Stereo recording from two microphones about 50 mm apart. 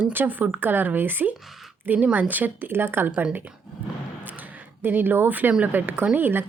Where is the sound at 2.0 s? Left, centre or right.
Right.